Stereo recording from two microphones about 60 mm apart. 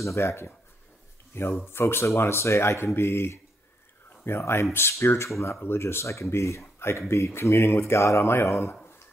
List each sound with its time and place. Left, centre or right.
0.0 s speech: left
5.6 s speech: left